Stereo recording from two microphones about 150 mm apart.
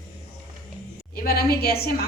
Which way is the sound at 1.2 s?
90° left.